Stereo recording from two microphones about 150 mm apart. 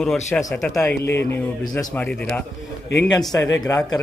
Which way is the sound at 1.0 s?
15° left (ahead or behind).